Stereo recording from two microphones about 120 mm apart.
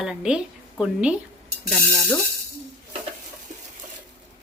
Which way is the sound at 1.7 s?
5° left (ahead or behind).